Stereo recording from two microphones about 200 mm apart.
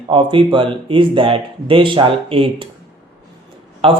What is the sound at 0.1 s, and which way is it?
Speech, 25° right (ahead or behind).